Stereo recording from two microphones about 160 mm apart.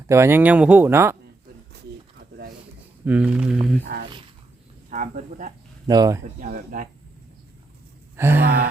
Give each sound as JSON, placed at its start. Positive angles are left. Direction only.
{"t": 0.1, "sound": "speech", "side_deg": -15}
{"t": 3.0, "sound": "speech", "side_deg": -10}
{"t": 4.9, "sound": "speech", "side_deg": -55}
{"t": 5.9, "sound": "speech", "side_deg": -25}
{"t": 6.4, "sound": "speech", "side_deg": -60}
{"t": 8.1, "sound": "gasp", "side_deg": -15}